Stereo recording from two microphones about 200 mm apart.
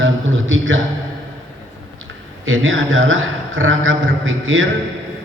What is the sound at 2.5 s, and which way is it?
A man's voice, 75° right (ahead or behind).